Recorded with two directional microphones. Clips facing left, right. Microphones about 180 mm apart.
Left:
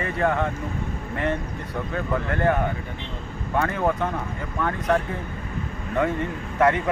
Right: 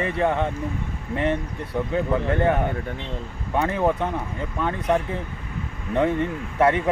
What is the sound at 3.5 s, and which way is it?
Speech, 20° right (ahead or behind).